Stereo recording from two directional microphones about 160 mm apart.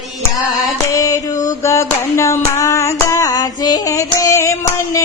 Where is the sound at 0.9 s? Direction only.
20° left (ahead or behind).